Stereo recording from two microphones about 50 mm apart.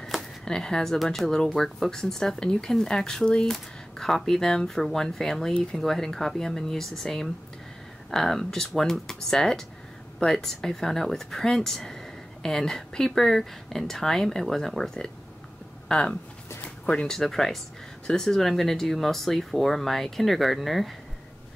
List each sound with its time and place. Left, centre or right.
0.5 s speech: centre
16.6 s a sound: left
17.1 s speech: centre